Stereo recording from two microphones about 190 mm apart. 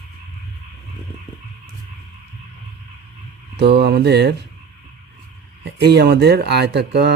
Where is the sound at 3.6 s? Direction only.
60° right (ahead or behind).